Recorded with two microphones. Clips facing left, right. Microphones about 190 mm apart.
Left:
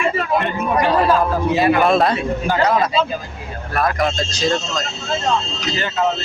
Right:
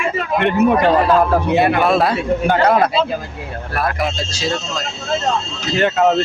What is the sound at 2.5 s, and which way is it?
Speech, 55° right (ahead or behind).